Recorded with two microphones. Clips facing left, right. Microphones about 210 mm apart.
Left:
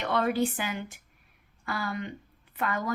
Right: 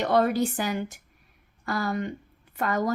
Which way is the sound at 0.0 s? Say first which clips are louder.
Right 4 dB; 40° right (ahead or behind).